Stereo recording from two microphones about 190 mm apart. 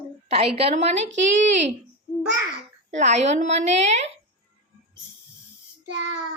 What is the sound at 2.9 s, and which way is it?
A woman's voice, 35° right (ahead or behind).